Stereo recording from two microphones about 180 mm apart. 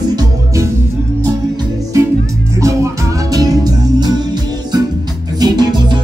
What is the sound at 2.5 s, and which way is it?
Music, 15° right (ahead or behind).